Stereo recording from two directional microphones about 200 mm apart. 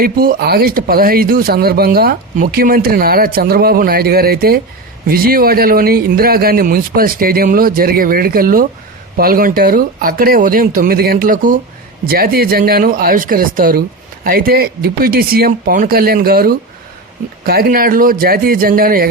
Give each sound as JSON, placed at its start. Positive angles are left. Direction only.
{"t": 0.0, "sound": "speech", "side_deg": -50}